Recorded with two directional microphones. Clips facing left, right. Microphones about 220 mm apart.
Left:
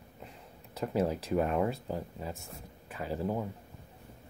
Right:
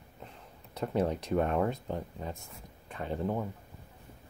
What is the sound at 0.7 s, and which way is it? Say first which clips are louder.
Speech: even; 5° left (ahead or behind).